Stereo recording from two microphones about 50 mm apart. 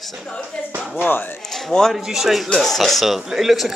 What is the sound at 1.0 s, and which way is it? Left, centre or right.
Speech, left.